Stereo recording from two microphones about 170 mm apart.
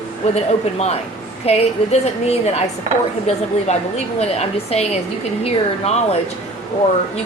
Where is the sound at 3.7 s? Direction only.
40° left (ahead or behind).